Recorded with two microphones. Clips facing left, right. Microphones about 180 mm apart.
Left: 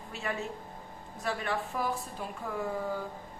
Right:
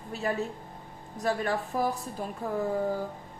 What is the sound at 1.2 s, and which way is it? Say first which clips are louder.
Speech: right 5 dB; 40° right (ahead or behind).